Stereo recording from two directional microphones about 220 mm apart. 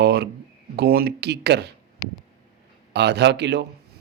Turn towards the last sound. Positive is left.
turn(degrees=-50)  # may be behind; listen again after turning